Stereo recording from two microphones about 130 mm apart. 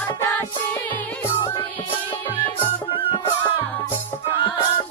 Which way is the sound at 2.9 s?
40° left (ahead or behind).